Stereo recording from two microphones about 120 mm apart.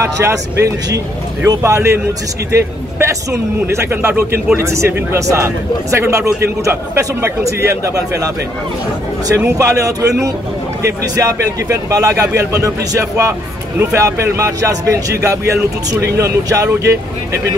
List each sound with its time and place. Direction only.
0.0 s speech: 25° right (ahead or behind)
3.0 s speech: 25° right (ahead or behind)
9.3 s speech: 25° right (ahead or behind)